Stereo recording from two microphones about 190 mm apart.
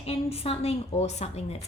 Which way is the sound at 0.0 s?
30° left (ahead or behind).